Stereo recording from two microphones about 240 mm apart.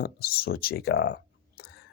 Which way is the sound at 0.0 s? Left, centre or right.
Left.